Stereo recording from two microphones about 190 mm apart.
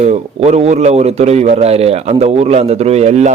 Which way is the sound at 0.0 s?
35° right (ahead or behind).